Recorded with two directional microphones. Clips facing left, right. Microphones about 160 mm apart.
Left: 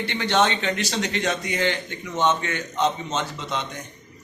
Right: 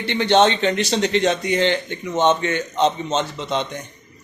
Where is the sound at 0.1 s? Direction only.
25° right (ahead or behind).